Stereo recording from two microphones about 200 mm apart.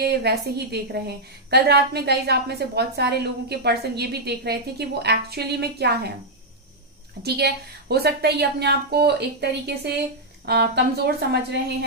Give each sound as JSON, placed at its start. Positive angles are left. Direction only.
{"t": 0.0, "sound": "a woman's voice", "side_deg": -55}
{"t": 7.2, "sound": "a woman's voice", "side_deg": -55}